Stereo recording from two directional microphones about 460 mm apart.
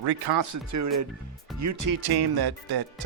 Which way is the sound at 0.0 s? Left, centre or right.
Right.